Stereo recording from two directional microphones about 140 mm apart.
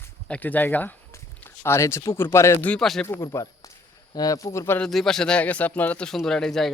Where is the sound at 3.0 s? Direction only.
20° left (ahead or behind).